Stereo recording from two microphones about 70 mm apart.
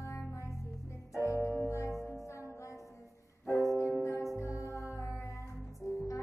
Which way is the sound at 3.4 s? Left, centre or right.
Left.